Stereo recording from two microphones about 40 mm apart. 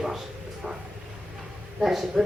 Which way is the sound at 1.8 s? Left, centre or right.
Centre.